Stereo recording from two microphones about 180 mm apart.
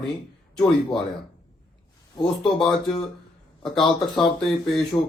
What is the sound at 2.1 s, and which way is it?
Speech, centre (ahead or behind).